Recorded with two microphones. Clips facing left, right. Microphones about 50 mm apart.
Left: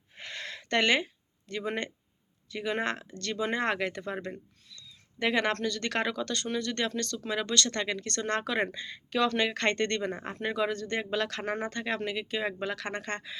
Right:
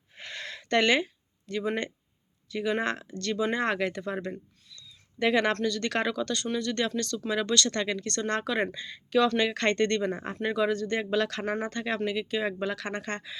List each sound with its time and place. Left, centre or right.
0.2 s a sound: left
2.5 s speech: left
5.6 s speech: left
7.9 s speech: left
8.7 s speech: left
11.4 s speech: left